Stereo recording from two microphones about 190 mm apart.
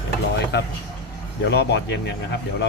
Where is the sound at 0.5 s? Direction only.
60° left (ahead or behind).